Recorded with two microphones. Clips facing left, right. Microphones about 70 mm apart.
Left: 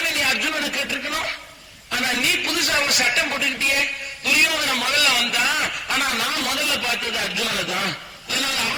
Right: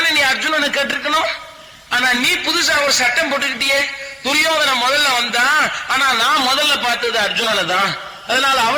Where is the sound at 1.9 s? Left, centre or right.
Right.